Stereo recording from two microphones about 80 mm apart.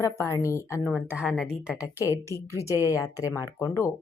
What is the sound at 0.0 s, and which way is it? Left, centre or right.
Speech, left.